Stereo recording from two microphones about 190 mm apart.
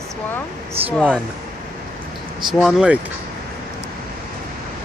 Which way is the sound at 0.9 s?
5° left (ahead or behind).